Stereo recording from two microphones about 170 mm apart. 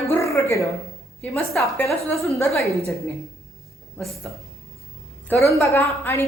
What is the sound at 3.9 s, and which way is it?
Speech, centre (ahead or behind).